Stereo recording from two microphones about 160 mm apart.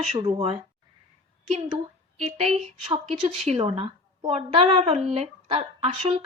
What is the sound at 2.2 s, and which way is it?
A woman's voice, 40° right (ahead or behind).